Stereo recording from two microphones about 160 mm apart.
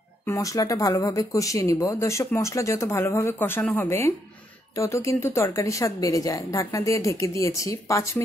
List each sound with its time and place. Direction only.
0.3 s speech: 20° left (ahead or behind)